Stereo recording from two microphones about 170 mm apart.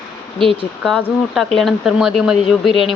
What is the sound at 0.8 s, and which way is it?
Speech, centre (ahead or behind).